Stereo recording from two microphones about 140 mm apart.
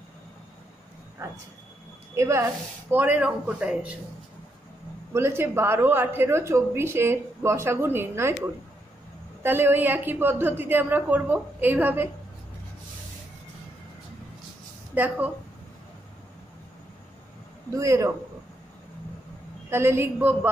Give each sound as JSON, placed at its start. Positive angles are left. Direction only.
{"t": 2.1, "sound": "a woman's voice", "side_deg": -20}
{"t": 5.1, "sound": "a woman's voice", "side_deg": -20}
{"t": 9.4, "sound": "a woman's voice", "side_deg": -15}
{"t": 15.0, "sound": "a woman's voice", "side_deg": -10}
{"t": 17.6, "sound": "a man's voice", "side_deg": -20}
{"t": 19.7, "sound": "a woman's voice", "side_deg": -15}